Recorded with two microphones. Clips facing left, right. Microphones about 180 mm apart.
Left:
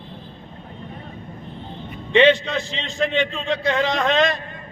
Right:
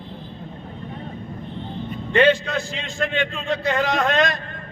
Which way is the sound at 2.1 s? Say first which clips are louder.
Left 2 dB; 5° right (ahead or behind).